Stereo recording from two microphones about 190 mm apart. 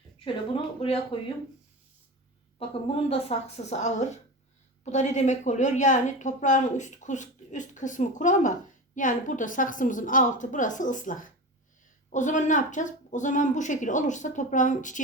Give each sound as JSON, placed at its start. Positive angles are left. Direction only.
{"t": 1.1, "sound": "speech", "side_deg": 30}
{"t": 2.6, "sound": "a woman's voice", "side_deg": 30}